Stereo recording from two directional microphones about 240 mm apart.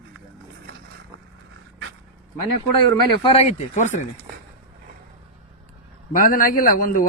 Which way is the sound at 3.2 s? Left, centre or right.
Left.